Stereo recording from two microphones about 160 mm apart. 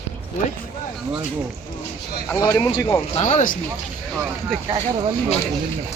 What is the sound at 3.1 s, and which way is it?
Speech, 50° left (ahead or behind).